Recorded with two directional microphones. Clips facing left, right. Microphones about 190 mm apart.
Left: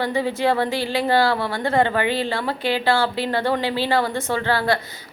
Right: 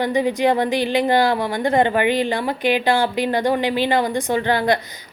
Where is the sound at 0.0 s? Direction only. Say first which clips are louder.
Right 3 dB; 15° right (ahead or behind).